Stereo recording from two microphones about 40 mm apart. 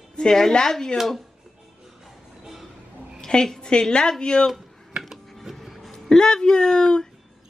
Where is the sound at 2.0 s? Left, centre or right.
Centre.